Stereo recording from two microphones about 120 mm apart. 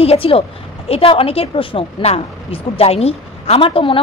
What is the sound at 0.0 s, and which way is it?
A woman's voice, 55° left (ahead or behind).